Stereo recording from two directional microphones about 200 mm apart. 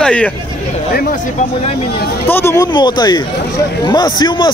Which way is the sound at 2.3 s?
10° left (ahead or behind).